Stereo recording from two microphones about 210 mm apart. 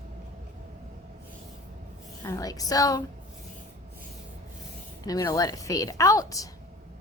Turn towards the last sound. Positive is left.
turn(degrees=15)  # may be behind; listen again after turning